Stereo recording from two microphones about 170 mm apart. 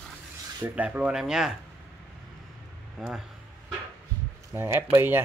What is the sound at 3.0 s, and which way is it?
Speech, 5° right (ahead or behind).